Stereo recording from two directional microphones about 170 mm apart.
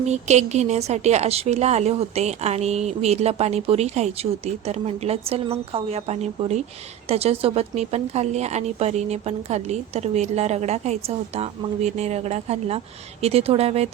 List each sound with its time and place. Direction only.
0.0 s a woman's voice: 40° right (ahead or behind)